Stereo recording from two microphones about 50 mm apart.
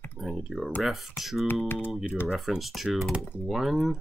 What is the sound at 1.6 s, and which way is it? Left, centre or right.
Speech, left.